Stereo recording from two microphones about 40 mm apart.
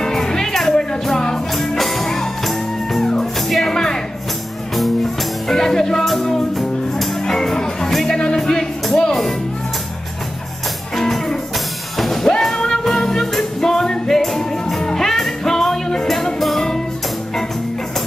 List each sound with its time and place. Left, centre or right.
0.0 s music: centre
3.7 s music: centre
5.5 s music: centre
8.4 s music: centre
11.0 s music: centre